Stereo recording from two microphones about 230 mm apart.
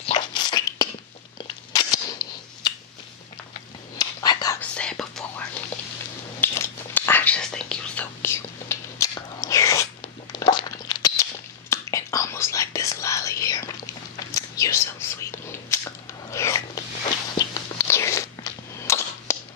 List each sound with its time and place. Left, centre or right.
0.0 s a sound: centre
1.7 s cap gun: centre
4.0 s whispering: centre
4.6 s whispering: centre
17.4 s biting: centre